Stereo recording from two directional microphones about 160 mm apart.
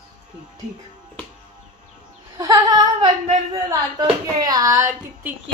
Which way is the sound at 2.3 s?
25° right (ahead or behind).